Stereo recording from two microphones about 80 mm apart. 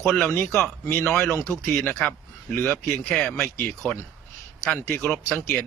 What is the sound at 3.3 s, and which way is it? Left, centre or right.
Speech, left.